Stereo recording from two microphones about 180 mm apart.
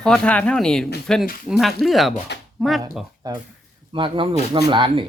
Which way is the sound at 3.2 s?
20° right (ahead or behind).